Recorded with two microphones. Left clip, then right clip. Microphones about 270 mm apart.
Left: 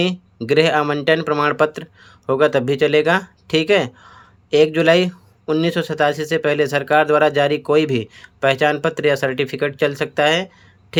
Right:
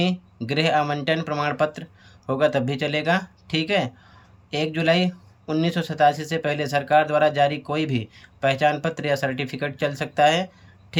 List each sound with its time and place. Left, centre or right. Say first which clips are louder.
0.0 s speech: left 5 dB; centre